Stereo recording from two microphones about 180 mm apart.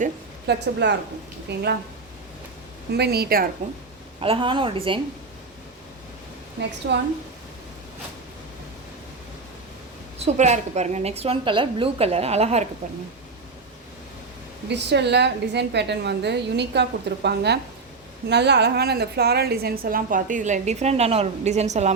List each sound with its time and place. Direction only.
0.4 s a woman's voice: 70° right (ahead or behind)
2.9 s a woman's voice: 65° right (ahead or behind)
4.2 s a woman's voice: 30° right (ahead or behind)
6.8 s a woman's voice: 65° right (ahead or behind)
10.2 s a woman's voice: 40° right (ahead or behind)
14.7 s a woman's voice: 70° right (ahead or behind); by 21.9 s 40° right (ahead or behind)